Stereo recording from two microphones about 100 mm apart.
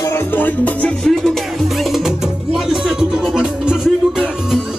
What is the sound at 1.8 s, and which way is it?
Music, centre (ahead or behind).